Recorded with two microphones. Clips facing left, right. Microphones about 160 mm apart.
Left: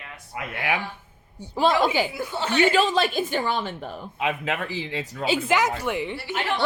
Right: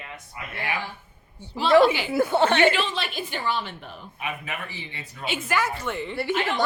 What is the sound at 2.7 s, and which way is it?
Speech, 40° left (ahead or behind).